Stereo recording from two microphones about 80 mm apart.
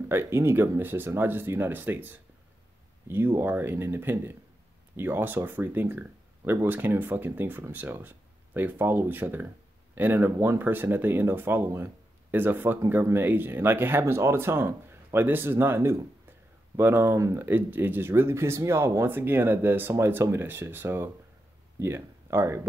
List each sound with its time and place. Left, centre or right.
0.1 s speech: right
17.5 s speech: right